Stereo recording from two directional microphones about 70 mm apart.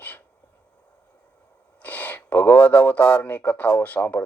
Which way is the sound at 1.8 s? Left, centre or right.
Left.